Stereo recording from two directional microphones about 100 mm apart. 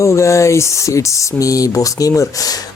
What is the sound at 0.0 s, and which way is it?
Speech, 30° left (ahead or behind).